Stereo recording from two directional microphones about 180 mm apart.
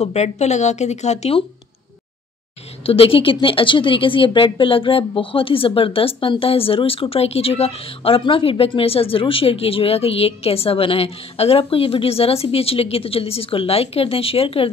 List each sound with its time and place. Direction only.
0.0 s a woman's voice: 35° left (ahead or behind)
2.8 s a woman's voice: 30° left (ahead or behind)